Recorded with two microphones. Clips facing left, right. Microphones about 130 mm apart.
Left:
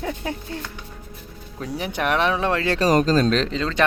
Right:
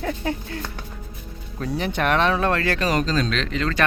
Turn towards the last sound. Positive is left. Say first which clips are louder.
# left 1 dB
turn(degrees=25)  # may be behind; listen again after turning